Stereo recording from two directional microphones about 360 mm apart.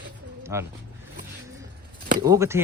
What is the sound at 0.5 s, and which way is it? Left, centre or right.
Speech, centre.